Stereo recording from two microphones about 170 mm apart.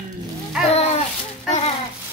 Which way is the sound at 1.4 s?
40° left (ahead or behind).